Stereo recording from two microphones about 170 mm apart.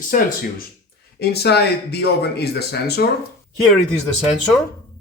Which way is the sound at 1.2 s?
70° left (ahead or behind).